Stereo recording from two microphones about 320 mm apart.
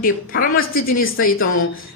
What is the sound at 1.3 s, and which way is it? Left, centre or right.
Speech, left.